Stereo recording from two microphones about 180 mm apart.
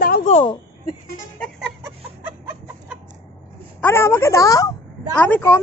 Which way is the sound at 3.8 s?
15° left (ahead or behind).